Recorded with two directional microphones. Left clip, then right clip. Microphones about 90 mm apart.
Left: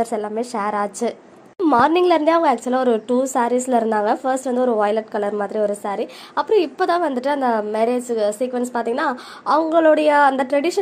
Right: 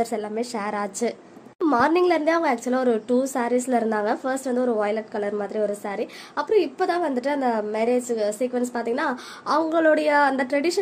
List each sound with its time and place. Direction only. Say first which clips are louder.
0.0 s a woman's voice: left 4 dB; 15° left (ahead or behind)
1.7 s a woman's voice: left 5 dB; 30° left (ahead or behind)
6.5 s a woman's voice: left 4 dB; 35° left (ahead or behind)